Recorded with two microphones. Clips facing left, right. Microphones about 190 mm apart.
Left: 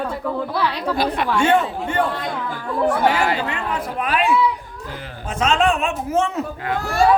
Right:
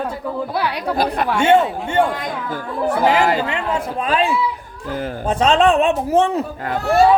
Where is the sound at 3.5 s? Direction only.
25° right (ahead or behind).